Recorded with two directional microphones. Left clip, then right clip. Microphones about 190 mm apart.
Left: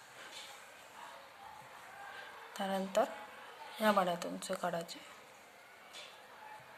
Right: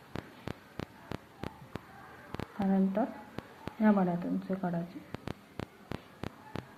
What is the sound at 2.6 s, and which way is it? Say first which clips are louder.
A woman's voice: right 1 dB; 25° left (ahead or behind).